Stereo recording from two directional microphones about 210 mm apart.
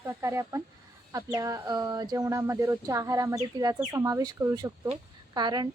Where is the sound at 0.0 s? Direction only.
15° right (ahead or behind).